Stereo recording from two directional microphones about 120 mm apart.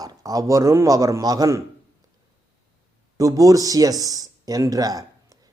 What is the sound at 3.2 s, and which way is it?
Speech, 30° right (ahead or behind).